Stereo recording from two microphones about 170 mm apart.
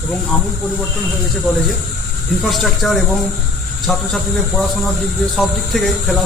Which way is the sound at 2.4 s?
Centre (ahead or behind).